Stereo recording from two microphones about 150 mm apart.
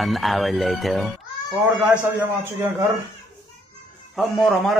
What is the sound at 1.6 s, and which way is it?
Speech, 10° right (ahead or behind).